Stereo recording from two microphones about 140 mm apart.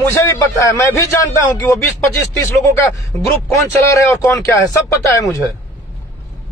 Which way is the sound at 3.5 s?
20° left (ahead or behind).